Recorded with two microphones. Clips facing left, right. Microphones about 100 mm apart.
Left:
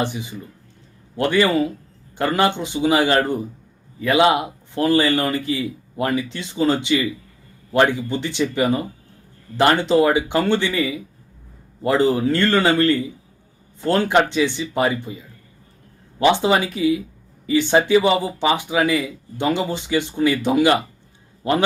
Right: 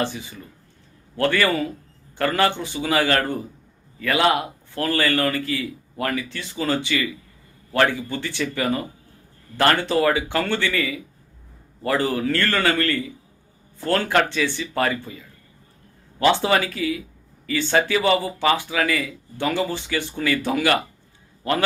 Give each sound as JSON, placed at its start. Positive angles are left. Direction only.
{"t": 0.0, "sound": "a man's voice", "side_deg": 15}